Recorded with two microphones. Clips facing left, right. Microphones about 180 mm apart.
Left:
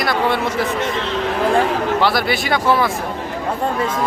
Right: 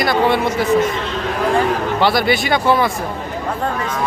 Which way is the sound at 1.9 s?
Centre (ahead or behind).